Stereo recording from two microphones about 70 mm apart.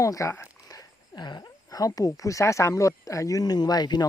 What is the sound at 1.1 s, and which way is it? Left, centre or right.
Speech, left.